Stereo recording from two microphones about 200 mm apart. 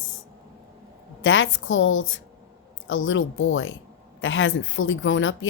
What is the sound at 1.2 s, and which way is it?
A woman's voice, 70° left (ahead or behind).